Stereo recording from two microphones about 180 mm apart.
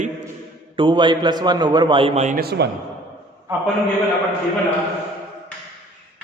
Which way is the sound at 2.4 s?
65° right (ahead or behind).